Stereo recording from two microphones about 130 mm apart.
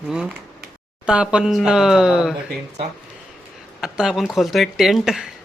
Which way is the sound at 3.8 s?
5° right (ahead or behind).